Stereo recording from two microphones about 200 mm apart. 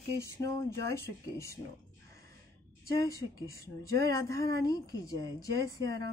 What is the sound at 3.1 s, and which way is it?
Speech, 15° left (ahead or behind).